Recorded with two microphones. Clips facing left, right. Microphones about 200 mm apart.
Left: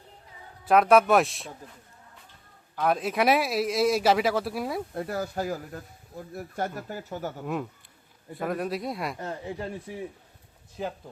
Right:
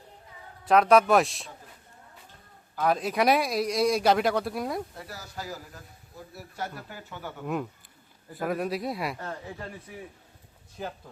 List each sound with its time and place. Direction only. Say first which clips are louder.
0.6 s speech: even; centre (ahead or behind)
2.7 s speech: even; centre (ahead or behind)
4.9 s speech: left 11 dB; 55° left (ahead or behind)
7.4 s speech: even; centre (ahead or behind)
9.1 s speech: left 4 dB; 20° left (ahead or behind)